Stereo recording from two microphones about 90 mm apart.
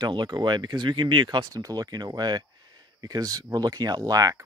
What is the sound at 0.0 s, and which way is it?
Speech, 55° right (ahead or behind).